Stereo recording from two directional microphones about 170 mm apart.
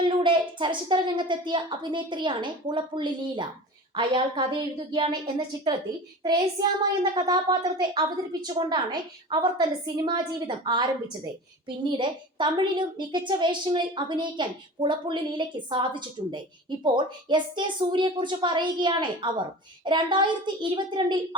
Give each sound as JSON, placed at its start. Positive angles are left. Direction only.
{"t": 0.0, "sound": "a woman's voice", "side_deg": -30}